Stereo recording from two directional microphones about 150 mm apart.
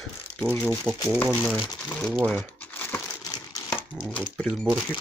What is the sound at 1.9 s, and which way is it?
Crumpling, 5° left (ahead or behind).